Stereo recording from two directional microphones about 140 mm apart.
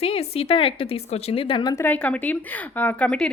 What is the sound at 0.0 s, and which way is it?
A woman's voice, 45° left (ahead or behind).